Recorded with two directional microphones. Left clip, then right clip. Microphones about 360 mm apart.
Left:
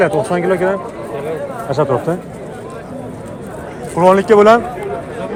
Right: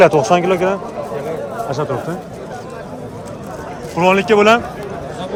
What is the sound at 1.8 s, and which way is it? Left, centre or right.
Speech, centre.